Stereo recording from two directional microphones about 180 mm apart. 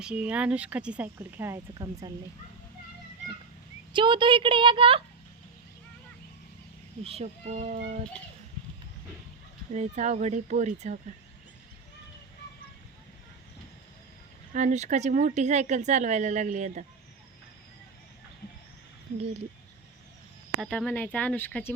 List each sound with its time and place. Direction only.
0.0 s speech: 5° right (ahead or behind)
3.9 s a woman's voice: 25° right (ahead or behind)
7.0 s speech: 35° right (ahead or behind)
9.7 s speech: 40° right (ahead or behind)
14.5 s speech: 40° right (ahead or behind)
20.6 s speech: 5° left (ahead or behind)